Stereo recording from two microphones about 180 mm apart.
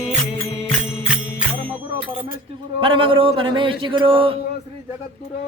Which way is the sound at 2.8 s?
30° right (ahead or behind).